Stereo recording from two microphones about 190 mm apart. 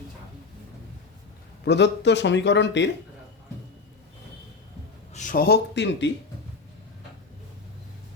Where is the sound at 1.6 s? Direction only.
65° left (ahead or behind).